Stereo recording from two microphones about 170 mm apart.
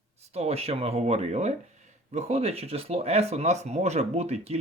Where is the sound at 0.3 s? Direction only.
35° right (ahead or behind).